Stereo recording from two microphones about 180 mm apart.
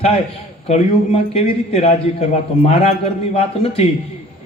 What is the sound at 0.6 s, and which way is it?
A man's voice, 35° left (ahead or behind).